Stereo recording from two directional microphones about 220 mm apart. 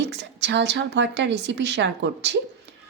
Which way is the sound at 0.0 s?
50° right (ahead or behind).